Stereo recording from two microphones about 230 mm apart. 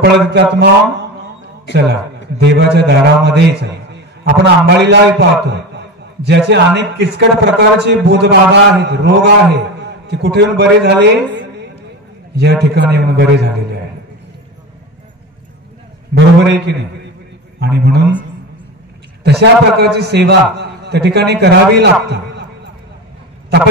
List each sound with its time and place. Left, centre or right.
0.0 s a man's voice: right
16.4 s a man's voice: right
19.2 s a man's voice: right